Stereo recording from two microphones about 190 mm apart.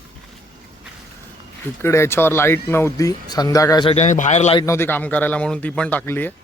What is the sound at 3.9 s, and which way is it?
Speech, 40° left (ahead or behind).